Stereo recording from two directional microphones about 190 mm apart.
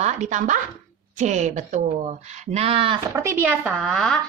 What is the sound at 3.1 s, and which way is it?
A woman's voice, 15° right (ahead or behind).